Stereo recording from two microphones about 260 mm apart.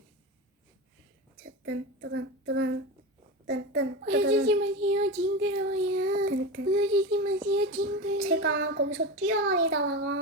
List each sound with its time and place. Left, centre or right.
1.6 s a child's voice: right